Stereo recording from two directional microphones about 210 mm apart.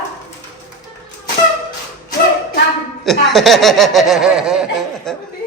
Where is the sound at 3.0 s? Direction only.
Centre (ahead or behind).